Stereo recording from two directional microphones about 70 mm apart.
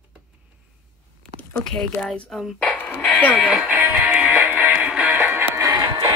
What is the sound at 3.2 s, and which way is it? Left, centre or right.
Speech, left.